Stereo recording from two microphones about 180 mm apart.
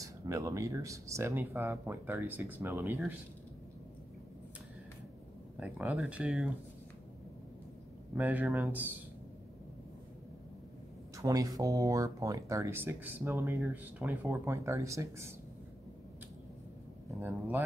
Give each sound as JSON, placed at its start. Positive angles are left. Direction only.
{"t": 0.0, "sound": "speech", "side_deg": -20}
{"t": 5.6, "sound": "speech", "side_deg": -5}
{"t": 8.1, "sound": "speech", "side_deg": -10}
{"t": 11.1, "sound": "speech", "side_deg": -20}
{"t": 17.2, "sound": "speech", "side_deg": -10}